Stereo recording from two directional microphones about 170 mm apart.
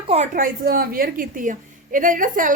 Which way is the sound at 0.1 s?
45° right (ahead or behind).